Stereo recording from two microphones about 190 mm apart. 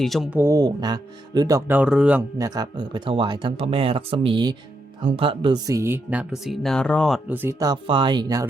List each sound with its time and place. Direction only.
0.0 s speech: centre (ahead or behind)
2.4 s speech: 20° right (ahead or behind); by 7.2 s 5° left (ahead or behind)
7.3 s speech: 10° right (ahead or behind)